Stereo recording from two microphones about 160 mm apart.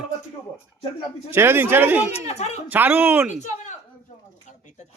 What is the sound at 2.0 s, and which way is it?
Speech, 40° left (ahead or behind).